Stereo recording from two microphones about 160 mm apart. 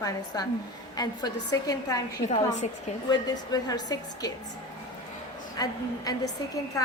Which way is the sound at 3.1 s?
25° left (ahead or behind).